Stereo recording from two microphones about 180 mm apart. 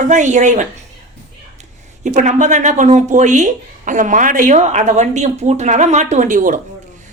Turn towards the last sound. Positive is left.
turn(degrees=-45)  # may be behind; listen again after turning